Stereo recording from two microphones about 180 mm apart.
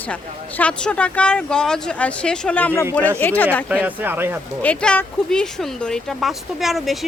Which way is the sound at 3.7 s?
10° right (ahead or behind).